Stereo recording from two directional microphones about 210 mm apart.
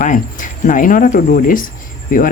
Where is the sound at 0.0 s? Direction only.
40° left (ahead or behind).